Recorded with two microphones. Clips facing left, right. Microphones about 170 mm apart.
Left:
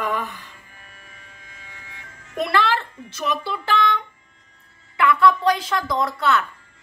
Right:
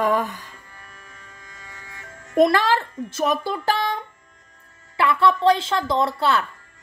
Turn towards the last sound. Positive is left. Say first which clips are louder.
# right 1 dB
turn(degrees=-30)  # may be behind; listen again after turning